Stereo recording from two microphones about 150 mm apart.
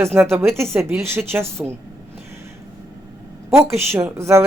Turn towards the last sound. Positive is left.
turn(degrees=-20)  # may be behind; listen again after turning